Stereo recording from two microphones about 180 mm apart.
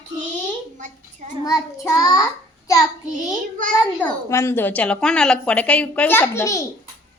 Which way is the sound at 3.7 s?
10° left (ahead or behind).